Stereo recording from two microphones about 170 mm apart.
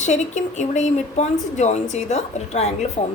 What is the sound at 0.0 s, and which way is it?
A woman's voice, 45° left (ahead or behind).